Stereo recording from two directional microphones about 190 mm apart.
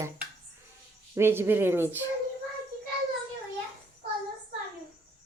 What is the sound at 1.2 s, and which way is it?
Speech, 15° right (ahead or behind).